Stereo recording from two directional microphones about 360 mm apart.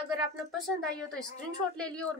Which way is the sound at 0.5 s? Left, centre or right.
Centre.